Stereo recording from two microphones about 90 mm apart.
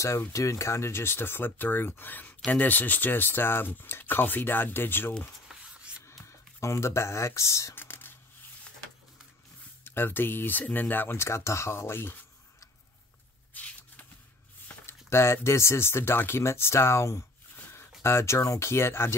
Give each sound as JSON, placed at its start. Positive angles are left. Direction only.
{"t": 0.3, "sound": "speech", "side_deg": 35}
{"t": 5.8, "sound": "rub", "side_deg": -10}
{"t": 6.0, "sound": "speech", "side_deg": 35}
{"t": 7.7, "sound": "whispering", "side_deg": 25}
{"t": 9.8, "sound": "speech", "side_deg": 25}
{"t": 13.5, "sound": "a sound", "side_deg": 15}
{"t": 14.7, "sound": "speech", "side_deg": 25}